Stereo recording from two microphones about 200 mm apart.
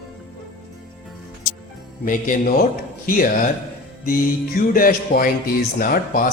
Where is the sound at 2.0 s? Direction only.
40° left (ahead or behind).